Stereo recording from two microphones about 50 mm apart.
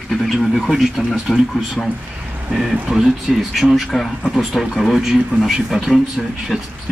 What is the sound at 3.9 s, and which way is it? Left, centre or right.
Speech, centre.